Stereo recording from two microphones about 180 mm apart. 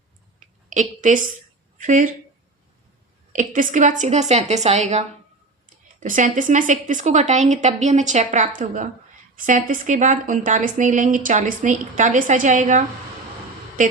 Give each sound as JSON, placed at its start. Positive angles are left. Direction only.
{"t": 0.3, "sound": "a sound", "side_deg": -45}
{"t": 1.8, "sound": "a woman's voice", "side_deg": -45}
{"t": 3.3, "sound": "a woman's voice", "side_deg": -45}